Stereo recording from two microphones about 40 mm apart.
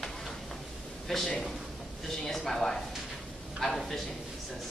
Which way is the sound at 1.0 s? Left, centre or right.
Centre.